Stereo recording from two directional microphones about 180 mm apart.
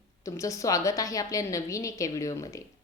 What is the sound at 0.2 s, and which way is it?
A woman's voice, 15° left (ahead or behind).